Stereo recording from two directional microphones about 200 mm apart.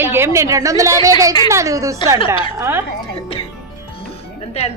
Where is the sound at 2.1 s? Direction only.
25° left (ahead or behind).